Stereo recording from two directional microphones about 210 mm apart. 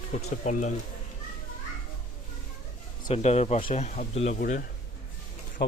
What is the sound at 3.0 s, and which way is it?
Speech, 30° left (ahead or behind).